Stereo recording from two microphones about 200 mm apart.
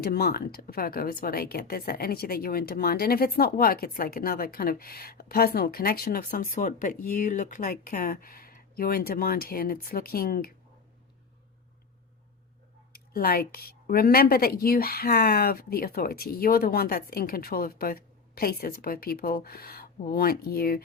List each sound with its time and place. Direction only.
0.0 s a woman's voice: 50° left (ahead or behind)
12.9 s a woman's voice: 50° left (ahead or behind)